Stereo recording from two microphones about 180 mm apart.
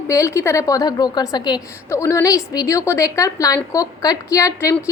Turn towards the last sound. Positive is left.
turn(degrees=15)  # may be behind; listen again after turning